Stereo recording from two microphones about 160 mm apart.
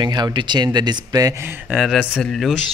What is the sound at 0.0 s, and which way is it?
Speech, 25° right (ahead or behind).